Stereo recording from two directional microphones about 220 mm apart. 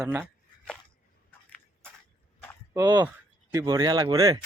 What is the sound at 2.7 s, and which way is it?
Speech, 15° right (ahead or behind).